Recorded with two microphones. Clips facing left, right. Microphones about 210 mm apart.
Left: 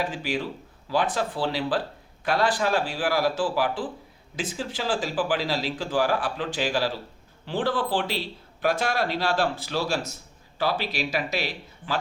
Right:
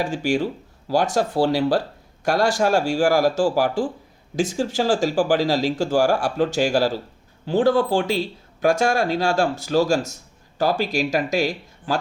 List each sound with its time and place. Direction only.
0.0 s speech: 45° right (ahead or behind)